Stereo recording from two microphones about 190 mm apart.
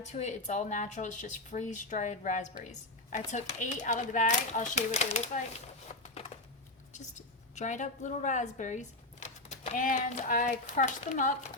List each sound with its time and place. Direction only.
0.1 s speech: 35° left (ahead or behind)
5.9 s a sound: 35° left (ahead or behind)
6.9 s a woman's voice: 40° left (ahead or behind)